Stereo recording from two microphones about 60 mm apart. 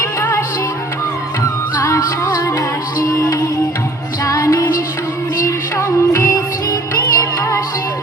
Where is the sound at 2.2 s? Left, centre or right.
Left.